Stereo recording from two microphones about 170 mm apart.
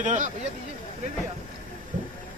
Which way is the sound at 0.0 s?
45° right (ahead or behind).